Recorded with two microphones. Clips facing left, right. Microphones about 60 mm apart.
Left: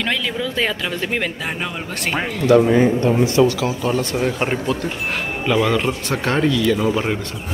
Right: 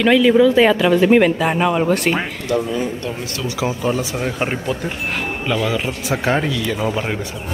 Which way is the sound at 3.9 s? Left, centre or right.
Centre.